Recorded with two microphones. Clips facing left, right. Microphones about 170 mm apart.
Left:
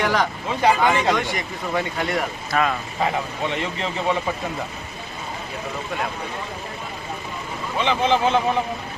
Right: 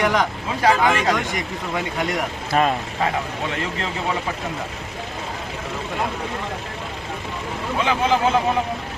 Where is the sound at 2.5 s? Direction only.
30° right (ahead or behind).